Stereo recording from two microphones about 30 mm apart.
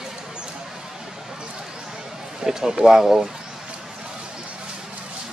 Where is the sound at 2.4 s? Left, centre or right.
Centre.